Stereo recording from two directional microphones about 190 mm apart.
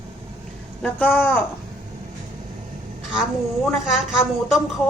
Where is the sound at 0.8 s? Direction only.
10° left (ahead or behind).